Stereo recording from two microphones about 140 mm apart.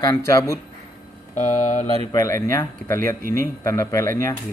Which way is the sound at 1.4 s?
60° left (ahead or behind).